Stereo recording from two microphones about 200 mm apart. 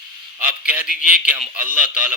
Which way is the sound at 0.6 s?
5° right (ahead or behind).